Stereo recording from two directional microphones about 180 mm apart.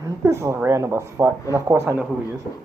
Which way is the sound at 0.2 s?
15° right (ahead or behind).